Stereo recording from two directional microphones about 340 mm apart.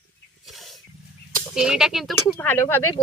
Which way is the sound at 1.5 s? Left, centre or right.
Centre.